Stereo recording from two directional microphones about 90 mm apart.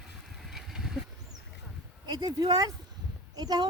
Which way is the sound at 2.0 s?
50° right (ahead or behind).